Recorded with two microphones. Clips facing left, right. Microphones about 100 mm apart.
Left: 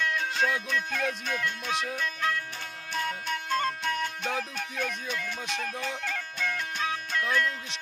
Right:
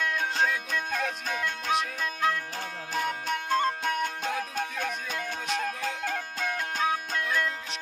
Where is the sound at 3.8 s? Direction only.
45° right (ahead or behind).